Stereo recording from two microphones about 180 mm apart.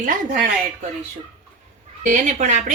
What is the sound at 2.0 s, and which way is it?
Speech, 50° right (ahead or behind).